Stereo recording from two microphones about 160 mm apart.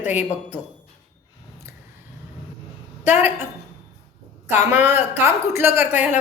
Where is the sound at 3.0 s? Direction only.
15° right (ahead or behind).